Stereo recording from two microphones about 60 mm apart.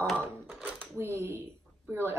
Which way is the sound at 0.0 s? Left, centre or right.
Centre.